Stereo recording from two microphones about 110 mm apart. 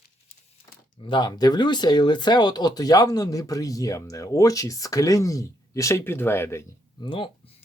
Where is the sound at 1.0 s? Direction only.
45° left (ahead or behind); by 6.7 s 20° left (ahead or behind).